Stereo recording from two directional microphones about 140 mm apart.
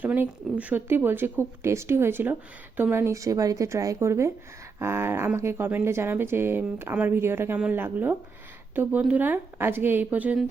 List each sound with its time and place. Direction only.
0.0 s speech: 10° right (ahead or behind)